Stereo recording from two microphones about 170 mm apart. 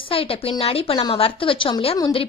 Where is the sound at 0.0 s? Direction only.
35° left (ahead or behind).